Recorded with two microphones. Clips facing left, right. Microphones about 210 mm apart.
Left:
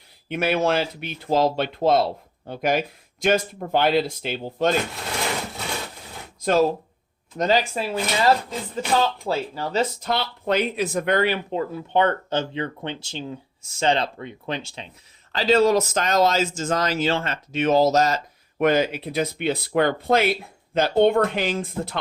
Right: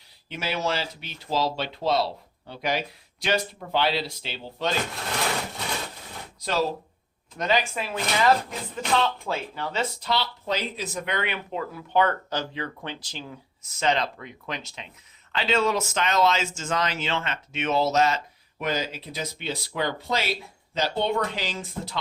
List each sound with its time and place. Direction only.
0.3 s speech: 55° left (ahead or behind)
6.4 s speech: 50° left (ahead or behind)
7.3 s speech: 40° left (ahead or behind)
18.6 s speech: 60° left (ahead or behind)